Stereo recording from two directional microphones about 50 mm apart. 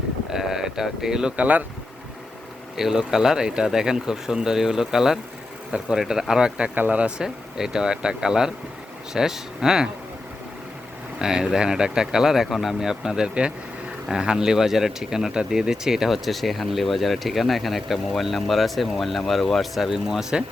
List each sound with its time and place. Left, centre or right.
0.3 s speech: centre
1.4 s speech: right
2.7 s speech: centre
6.7 s speech: right
7.2 s speech: centre
11.2 s speech: centre
19.9 s speech: centre